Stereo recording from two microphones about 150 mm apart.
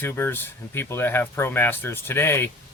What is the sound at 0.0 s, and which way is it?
Speech, 15° left (ahead or behind).